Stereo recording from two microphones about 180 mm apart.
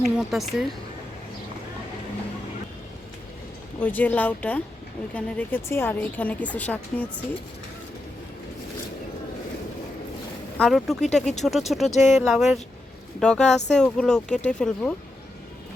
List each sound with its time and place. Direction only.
0.2 s speech: centre (ahead or behind)
3.8 s a woman's voice: 10° left (ahead or behind)
10.6 s speech: centre (ahead or behind)
11.9 s speech: 40° left (ahead or behind)
12.2 s speech: centre (ahead or behind)